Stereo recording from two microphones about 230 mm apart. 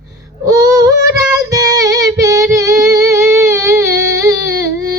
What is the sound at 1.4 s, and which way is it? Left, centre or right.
Music, centre.